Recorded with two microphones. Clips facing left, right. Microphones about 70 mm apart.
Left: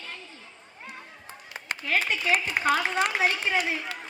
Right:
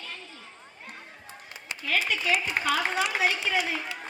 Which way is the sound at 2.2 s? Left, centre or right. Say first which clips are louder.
Left 2 dB; left.